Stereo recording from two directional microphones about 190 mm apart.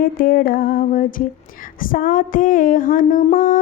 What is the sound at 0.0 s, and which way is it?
Music, 50° left (ahead or behind).